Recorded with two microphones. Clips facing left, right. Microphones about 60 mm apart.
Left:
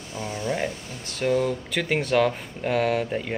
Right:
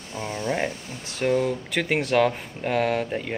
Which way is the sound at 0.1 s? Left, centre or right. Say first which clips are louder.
Right 1 dB; centre.